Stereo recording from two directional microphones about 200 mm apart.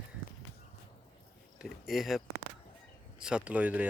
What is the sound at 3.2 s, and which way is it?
Speech, 5° right (ahead or behind).